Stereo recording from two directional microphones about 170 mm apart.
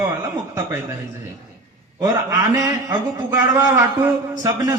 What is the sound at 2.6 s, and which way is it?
A man's voice, 20° right (ahead or behind).